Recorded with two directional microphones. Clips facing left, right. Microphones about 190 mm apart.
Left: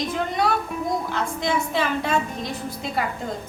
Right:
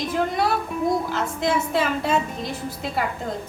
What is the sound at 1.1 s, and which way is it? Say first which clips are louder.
A woman's voice: right 1 dB; 5° right (ahead or behind).